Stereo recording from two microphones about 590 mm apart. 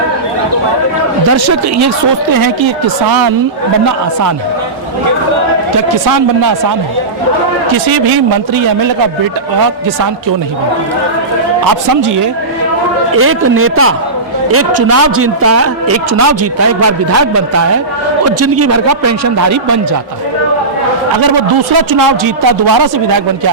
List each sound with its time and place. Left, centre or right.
1.3 s a man's voice: right
6.1 s speech: right
7.7 s speech: right
11.7 s a man's voice: right
21.7 s speech: right